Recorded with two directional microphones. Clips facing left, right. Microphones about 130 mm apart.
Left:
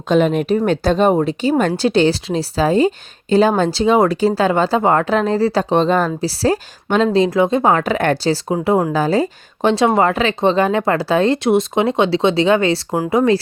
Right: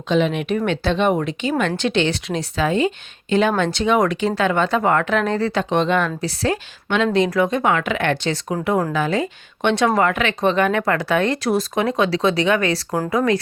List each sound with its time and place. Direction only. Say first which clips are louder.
0.1 s speech: left 4 dB; 45° left (ahead or behind); by 13.4 s 25° left (ahead or behind)